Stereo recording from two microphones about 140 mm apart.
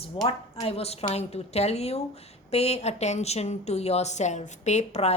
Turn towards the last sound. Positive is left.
turn(degrees=50)  # may be behind; listen again after turning